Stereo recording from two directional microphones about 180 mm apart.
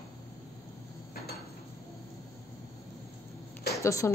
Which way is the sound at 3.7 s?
15° left (ahead or behind).